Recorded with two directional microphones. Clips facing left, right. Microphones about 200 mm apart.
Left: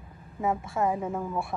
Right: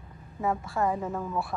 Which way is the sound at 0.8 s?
10° left (ahead or behind).